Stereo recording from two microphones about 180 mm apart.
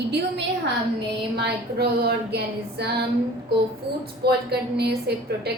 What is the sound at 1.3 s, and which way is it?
A woman's voice, 60° right (ahead or behind).